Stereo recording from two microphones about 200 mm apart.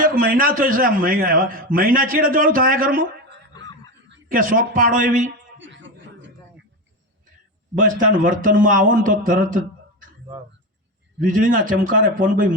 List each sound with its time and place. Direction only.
0.0 s a man's voice: 45° right (ahead or behind)
5.5 s a sound: 65° right (ahead or behind)
7.8 s a man's voice: 40° right (ahead or behind)
11.2 s a man's voice: 40° right (ahead or behind)